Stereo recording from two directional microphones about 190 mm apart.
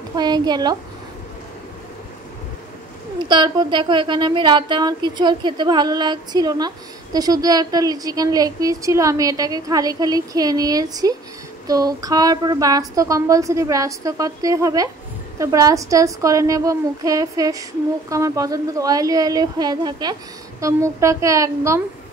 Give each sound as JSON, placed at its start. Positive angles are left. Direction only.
{"t": 0.1, "sound": "a woman's voice", "side_deg": -20}
{"t": 3.2, "sound": "a woman's voice", "side_deg": -25}